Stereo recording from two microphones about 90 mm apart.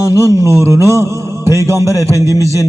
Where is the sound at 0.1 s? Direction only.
35° right (ahead or behind).